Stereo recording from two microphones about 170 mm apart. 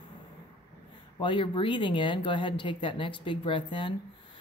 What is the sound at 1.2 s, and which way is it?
Speech, 30° left (ahead or behind).